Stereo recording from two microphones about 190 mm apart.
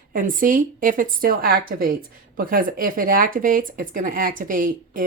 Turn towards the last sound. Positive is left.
turn(degrees=-45)  # may be behind; listen again after turning